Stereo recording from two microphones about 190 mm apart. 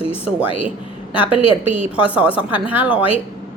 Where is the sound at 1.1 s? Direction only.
30° left (ahead or behind).